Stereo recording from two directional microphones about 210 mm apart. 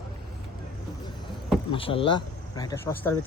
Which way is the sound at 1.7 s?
25° left (ahead or behind).